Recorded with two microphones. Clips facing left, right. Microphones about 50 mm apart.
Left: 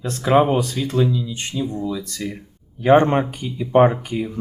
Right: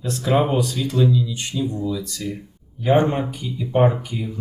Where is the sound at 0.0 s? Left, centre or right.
Left.